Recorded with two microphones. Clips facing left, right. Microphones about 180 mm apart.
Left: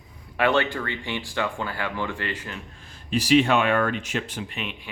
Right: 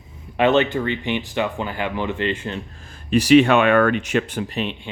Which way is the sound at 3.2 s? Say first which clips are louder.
Right 6 dB; 65° right (ahead or behind).